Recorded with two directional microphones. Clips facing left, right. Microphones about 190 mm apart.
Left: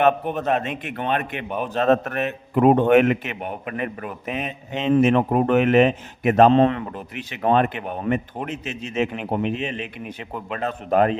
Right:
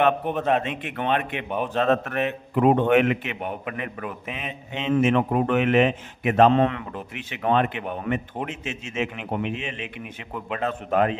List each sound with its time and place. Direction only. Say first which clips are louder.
0.3 s a man's voice: even; centre (ahead or behind)
0.6 s a man's voice: left 1 dB; 40° left (ahead or behind)
1.5 s a man's voice: even; 5° left (ahead or behind)
1.7 s a man's voice: left 3 dB; 40° left (ahead or behind)